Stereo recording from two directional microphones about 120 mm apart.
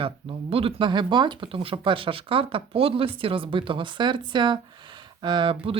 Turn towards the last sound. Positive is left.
turn(degrees=-45)  # may be behind; listen again after turning